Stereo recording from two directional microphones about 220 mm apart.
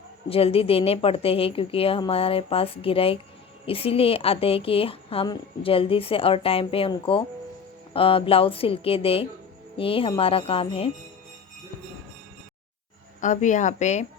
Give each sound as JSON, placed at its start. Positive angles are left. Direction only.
{"t": 0.3, "sound": "a woman's voice", "side_deg": 25}
{"t": 13.2, "sound": "a woman's voice", "side_deg": 35}